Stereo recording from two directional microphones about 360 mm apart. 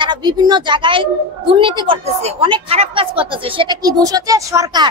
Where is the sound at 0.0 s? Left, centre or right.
Centre.